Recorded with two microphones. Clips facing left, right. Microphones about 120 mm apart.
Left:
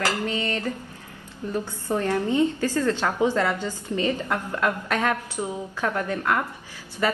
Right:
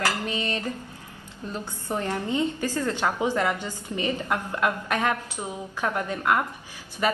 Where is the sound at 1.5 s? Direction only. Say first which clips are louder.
Left 4 dB; 20° right (ahead or behind).